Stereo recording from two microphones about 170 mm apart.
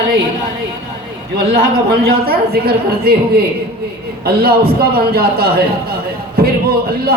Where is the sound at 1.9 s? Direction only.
60° right (ahead or behind).